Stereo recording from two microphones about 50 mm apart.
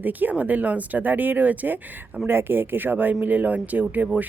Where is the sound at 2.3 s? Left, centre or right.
Right.